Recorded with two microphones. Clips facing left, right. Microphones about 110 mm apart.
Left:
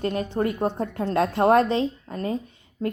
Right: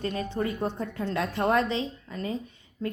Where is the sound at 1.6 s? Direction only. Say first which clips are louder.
Left 6 dB; 50° left (ahead or behind).